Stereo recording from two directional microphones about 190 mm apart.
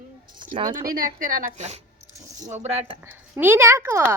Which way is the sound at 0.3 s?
25° right (ahead or behind).